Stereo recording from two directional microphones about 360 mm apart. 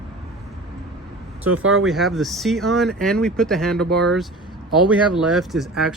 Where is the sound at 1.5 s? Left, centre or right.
Right.